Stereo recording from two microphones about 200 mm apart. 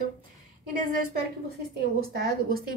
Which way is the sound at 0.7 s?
45° right (ahead or behind).